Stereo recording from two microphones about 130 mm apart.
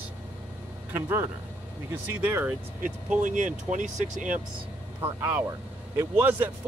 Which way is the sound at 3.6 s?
75° right (ahead or behind).